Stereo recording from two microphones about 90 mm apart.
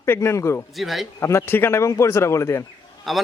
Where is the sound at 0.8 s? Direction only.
Centre (ahead or behind).